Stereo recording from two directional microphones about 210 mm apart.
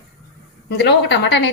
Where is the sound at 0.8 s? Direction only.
55° left (ahead or behind).